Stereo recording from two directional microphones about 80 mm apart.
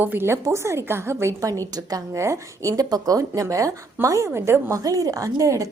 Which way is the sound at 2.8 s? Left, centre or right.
Right.